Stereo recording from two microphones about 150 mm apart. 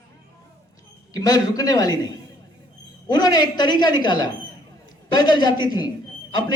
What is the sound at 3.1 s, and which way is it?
A woman's voice, 25° left (ahead or behind).